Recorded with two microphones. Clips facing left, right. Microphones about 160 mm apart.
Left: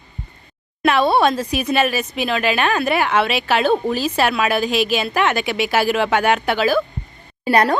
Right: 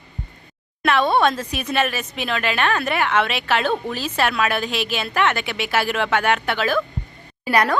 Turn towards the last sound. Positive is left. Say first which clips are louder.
# left 3 dB
turn(degrees=30)  # may be behind; listen again after turning